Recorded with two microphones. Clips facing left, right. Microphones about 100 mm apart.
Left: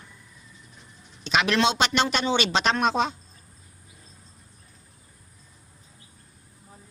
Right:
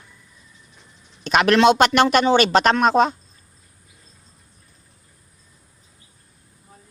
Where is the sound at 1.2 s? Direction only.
50° right (ahead or behind).